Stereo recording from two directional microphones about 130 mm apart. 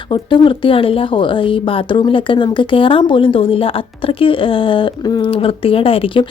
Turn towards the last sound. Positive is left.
turn(degrees=45)  # may be behind; listen again after turning